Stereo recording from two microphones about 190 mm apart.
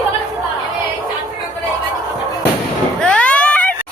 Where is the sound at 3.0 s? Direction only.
5° left (ahead or behind).